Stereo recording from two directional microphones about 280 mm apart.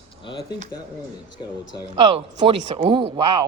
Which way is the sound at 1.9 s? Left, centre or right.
Right.